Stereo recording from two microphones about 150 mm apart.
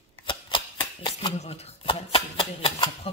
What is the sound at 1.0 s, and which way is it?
Speech, 40° left (ahead or behind).